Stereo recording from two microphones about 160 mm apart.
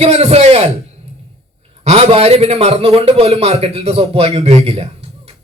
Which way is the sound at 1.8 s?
40° right (ahead or behind).